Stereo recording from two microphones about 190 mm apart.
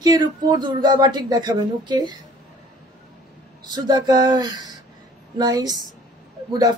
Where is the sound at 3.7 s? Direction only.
20° right (ahead or behind).